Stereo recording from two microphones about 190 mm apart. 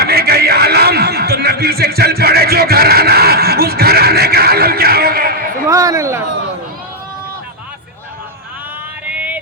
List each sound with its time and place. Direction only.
0.0 s chuckle: 55° right (ahead or behind)
5.6 s a sound: 15° right (ahead or behind)
9.0 s music: 5° right (ahead or behind)